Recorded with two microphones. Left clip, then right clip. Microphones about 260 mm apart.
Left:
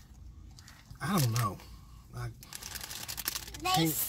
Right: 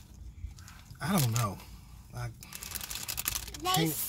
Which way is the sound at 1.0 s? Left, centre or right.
Centre.